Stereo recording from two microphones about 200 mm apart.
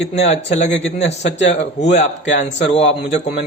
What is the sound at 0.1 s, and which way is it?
Speech, 30° left (ahead or behind).